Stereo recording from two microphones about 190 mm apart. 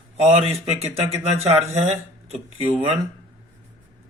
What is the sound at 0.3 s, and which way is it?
Speech, 35° right (ahead or behind).